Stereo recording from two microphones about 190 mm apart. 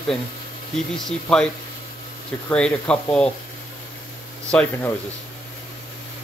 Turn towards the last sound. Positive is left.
turn(degrees=5)  # may be behind; listen again after turning